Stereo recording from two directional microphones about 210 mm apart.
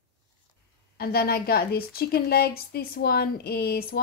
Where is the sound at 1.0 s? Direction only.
45° left (ahead or behind).